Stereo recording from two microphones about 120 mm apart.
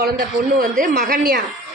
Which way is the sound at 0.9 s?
90° right.